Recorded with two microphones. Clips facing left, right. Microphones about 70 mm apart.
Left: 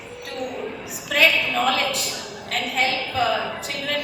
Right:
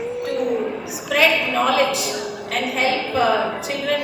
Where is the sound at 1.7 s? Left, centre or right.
Left.